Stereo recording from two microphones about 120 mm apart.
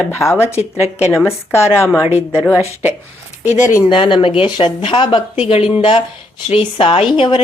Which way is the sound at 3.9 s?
45° left (ahead or behind).